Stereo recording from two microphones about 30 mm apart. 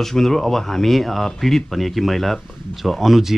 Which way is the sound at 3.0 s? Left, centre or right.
Centre.